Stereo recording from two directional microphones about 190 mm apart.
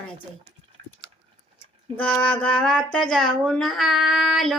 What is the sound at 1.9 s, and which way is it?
Speech, 5° left (ahead or behind).